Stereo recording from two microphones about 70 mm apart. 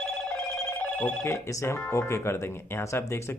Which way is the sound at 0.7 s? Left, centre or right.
Left.